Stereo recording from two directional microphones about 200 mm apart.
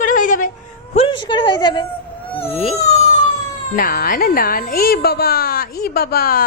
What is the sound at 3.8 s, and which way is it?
Speech, 45° left (ahead or behind).